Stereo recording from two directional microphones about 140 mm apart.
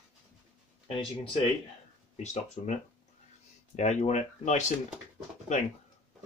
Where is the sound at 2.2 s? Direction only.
55° left (ahead or behind).